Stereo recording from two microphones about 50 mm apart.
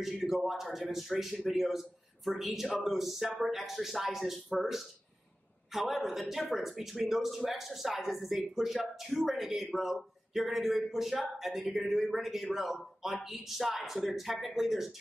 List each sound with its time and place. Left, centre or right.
0.0 s a man's voice: centre